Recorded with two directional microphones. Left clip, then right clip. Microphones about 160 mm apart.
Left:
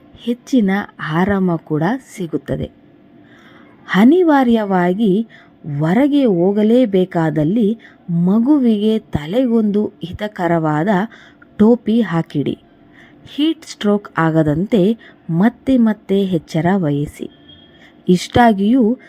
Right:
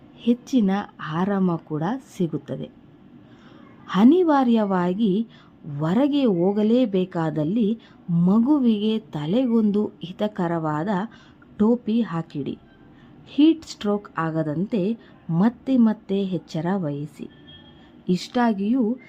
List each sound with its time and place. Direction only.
0.2 s speech: 20° left (ahead or behind)
3.8 s speech: 25° left (ahead or behind)